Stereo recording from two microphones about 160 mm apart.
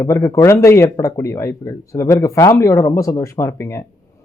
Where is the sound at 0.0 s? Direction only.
20° left (ahead or behind).